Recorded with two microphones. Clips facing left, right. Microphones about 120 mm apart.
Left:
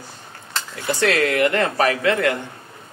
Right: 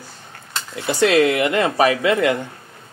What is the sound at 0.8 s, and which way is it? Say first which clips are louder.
Speech: right 4 dB; 15° right (ahead or behind).